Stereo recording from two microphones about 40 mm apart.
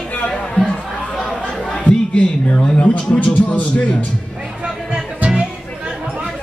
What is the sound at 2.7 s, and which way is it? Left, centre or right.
A man's voice, left.